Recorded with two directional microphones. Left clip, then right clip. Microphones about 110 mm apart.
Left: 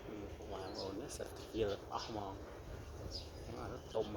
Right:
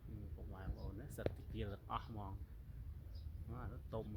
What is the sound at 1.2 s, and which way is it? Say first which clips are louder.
Speech: right 8 dB; 15° right (ahead or behind).